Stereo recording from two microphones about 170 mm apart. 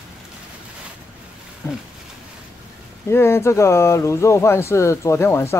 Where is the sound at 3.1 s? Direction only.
15° left (ahead or behind).